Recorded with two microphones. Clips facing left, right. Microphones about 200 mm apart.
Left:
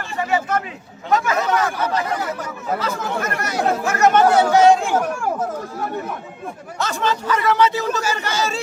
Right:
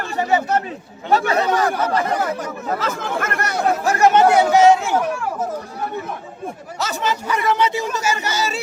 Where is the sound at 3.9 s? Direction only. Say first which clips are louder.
Right 2 dB; 30° right (ahead or behind).